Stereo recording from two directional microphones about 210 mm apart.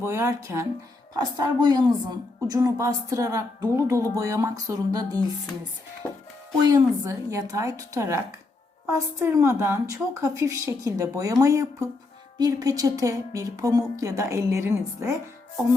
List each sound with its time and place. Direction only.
0.0 s a woman's voice: 10° right (ahead or behind)
6.0 s speech: 5° left (ahead or behind)
6.7 s a woman's voice: 15° right (ahead or behind)